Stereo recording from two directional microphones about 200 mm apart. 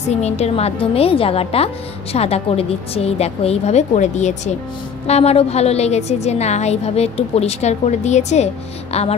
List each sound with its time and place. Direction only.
0.1 s a woman's voice: 35° left (ahead or behind)